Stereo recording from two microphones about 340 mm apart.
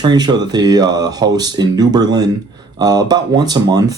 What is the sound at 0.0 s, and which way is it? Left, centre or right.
Speech, centre.